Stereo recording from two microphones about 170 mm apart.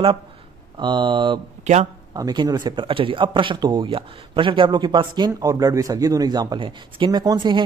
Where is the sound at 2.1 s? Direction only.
20° right (ahead or behind).